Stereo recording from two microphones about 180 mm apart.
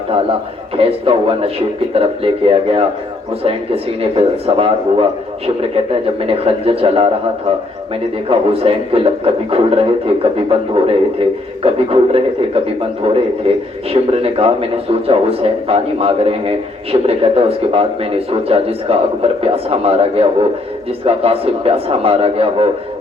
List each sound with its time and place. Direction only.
0.8 s a man's voice: 30° right (ahead or behind)
8.3 s a man's voice: 30° right (ahead or behind)